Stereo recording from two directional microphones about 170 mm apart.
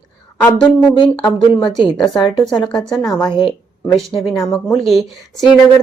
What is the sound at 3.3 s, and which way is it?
Speech, 25° left (ahead or behind).